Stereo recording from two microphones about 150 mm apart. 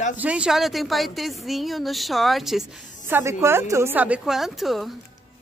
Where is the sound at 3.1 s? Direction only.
15° right (ahead or behind).